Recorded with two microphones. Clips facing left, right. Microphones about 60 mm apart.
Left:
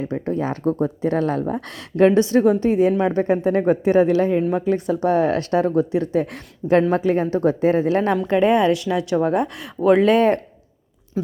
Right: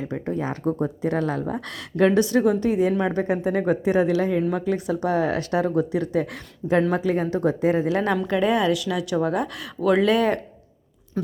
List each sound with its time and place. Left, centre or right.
0.0 s speech: left